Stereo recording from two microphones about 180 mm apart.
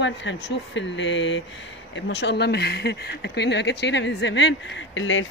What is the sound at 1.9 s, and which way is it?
Speech, 75° left (ahead or behind).